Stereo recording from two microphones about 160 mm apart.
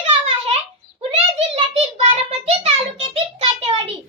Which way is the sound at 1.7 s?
40° right (ahead or behind).